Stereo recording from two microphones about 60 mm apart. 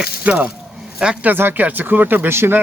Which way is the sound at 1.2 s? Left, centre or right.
Right.